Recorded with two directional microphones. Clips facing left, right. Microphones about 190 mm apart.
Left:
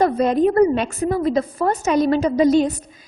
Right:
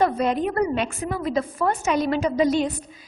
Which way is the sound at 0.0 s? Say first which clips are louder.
Left 5 dB; 40° left (ahead or behind).